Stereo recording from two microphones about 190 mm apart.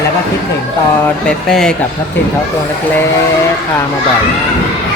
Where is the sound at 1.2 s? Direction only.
5° left (ahead or behind).